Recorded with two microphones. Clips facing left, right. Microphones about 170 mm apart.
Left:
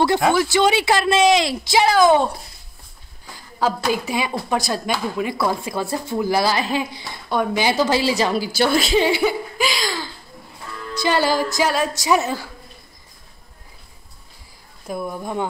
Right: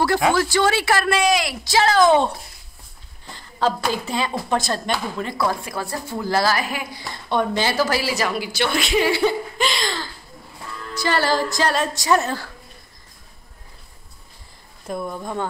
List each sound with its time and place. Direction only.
0.3 s speech: 15° left (ahead or behind)
3.3 s a woman's voice: 5° left (ahead or behind); by 7.1 s 25° left (ahead or behind)
7.2 s speech: 10° left (ahead or behind); by 9.0 s 40° left (ahead or behind)
9.2 s a sound: 5° left (ahead or behind)
11.0 s a woman's voice: 15° left (ahead or behind)
14.9 s a woman's voice: 5° left (ahead or behind)